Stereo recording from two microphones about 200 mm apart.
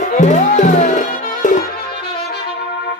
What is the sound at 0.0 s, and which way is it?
Music, 35° left (ahead or behind).